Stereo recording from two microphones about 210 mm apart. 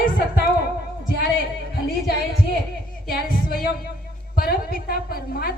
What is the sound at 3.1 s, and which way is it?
A woman's voice, 45° left (ahead or behind).